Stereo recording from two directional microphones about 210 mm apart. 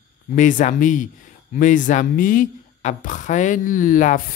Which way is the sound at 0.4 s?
35° left (ahead or behind).